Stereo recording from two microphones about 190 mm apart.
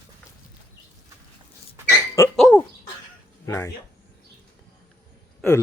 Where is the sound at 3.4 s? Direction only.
15° left (ahead or behind).